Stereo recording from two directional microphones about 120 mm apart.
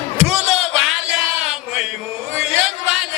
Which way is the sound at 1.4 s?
5° right (ahead or behind).